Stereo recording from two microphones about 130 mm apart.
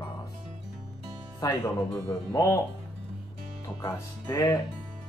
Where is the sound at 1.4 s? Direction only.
20° left (ahead or behind).